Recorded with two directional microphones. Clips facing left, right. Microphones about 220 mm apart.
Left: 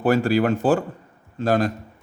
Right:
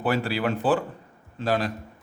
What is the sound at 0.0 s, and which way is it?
A man's voice, 45° left (ahead or behind).